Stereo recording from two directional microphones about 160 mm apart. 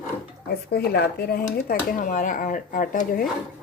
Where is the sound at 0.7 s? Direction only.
80° left; by 3.3 s 60° left (ahead or behind).